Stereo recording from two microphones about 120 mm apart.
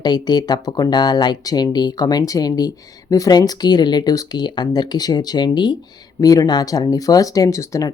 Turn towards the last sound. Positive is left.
turn(degrees=25)  # may be behind; listen again after turning